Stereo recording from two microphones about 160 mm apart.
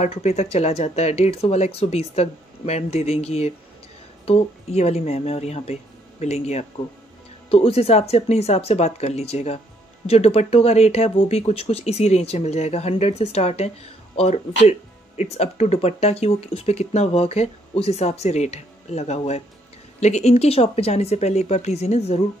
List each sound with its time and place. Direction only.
0.0 s speech: 45° left (ahead or behind)